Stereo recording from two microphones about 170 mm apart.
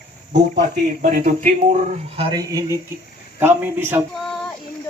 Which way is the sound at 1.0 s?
55° right (ahead or behind).